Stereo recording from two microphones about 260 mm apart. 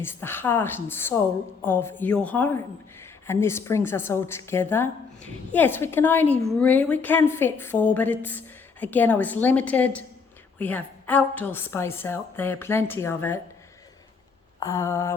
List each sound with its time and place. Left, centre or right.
0.0 s a woman's voice: centre
14.6 s a woman's voice: centre